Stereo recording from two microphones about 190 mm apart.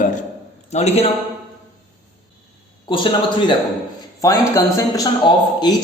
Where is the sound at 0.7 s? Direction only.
35° left (ahead or behind).